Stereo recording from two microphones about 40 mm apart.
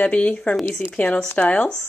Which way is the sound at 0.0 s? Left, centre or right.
Left.